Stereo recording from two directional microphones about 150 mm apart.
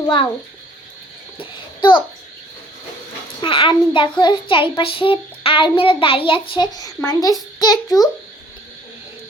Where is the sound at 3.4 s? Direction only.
35° left (ahead or behind).